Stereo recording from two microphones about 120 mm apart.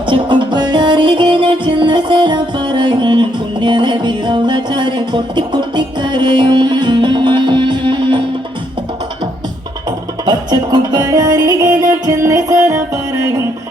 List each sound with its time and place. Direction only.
0.1 s music: 40° right (ahead or behind)
10.2 s music: 35° right (ahead or behind)